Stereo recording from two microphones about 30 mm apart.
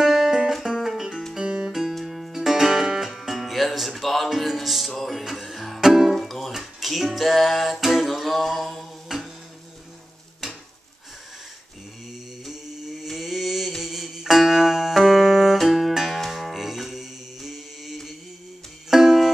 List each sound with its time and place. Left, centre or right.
0.0 s music: centre
0.7 s music: centre
2.3 s music: centre
6.0 s music: centre
6.6 s a sound: centre
7.8 s music: centre
9.1 s a sound: centre
12.4 s mantra: centre
13.7 s music: centre